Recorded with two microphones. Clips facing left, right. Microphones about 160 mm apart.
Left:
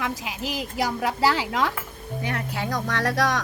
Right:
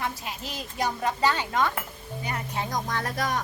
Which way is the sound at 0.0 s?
90° left.